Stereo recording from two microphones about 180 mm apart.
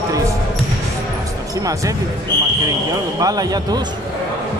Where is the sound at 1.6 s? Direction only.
20° right (ahead or behind).